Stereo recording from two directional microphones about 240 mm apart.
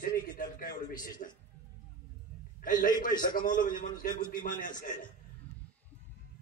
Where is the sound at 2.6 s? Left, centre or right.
Left.